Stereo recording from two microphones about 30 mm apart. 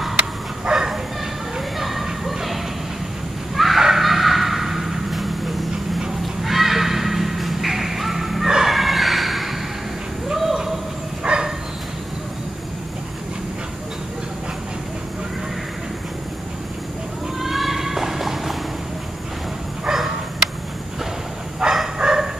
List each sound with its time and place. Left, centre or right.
0.7 s bow-wow: centre
1.8 s a sound: centre
11.3 s bow-wow: right
17.4 s music: centre
19.9 s bow-wow: centre
21.6 s bow-wow: centre